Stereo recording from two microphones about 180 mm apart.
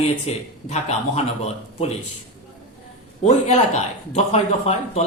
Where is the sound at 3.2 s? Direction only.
40° left (ahead or behind).